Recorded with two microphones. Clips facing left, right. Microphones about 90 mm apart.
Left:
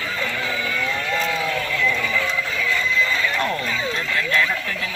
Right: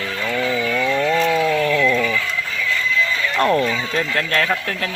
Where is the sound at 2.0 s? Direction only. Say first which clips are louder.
Right 3 dB; 5° left (ahead or behind).